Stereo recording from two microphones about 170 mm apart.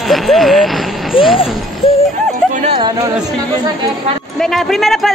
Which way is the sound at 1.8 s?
35° left (ahead or behind).